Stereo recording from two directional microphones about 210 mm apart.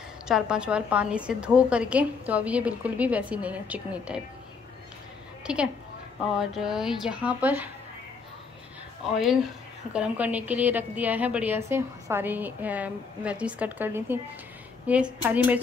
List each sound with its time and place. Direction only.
0.3 s a woman's voice: 5° right (ahead or behind)
5.4 s a woman's voice: 5° right (ahead or behind)
9.0 s a woman's voice: centre (ahead or behind)